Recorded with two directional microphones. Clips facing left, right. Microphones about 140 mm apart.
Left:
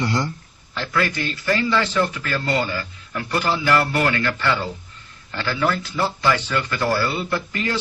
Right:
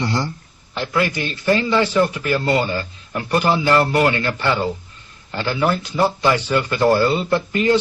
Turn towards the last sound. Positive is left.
turn(degrees=-20)  # may be behind; listen again after turning